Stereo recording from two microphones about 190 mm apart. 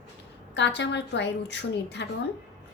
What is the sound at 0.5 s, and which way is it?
Speech, 65° left (ahead or behind).